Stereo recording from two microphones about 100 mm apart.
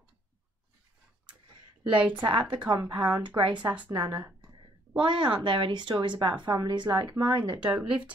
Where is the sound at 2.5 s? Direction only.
55° right (ahead or behind).